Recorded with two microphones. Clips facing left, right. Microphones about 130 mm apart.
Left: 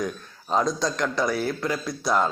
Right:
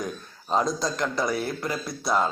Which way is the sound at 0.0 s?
5° right (ahead or behind).